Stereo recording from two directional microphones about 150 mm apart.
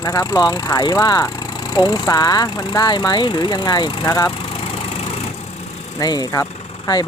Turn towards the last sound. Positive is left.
turn(degrees=45)  # may be behind; listen again after turning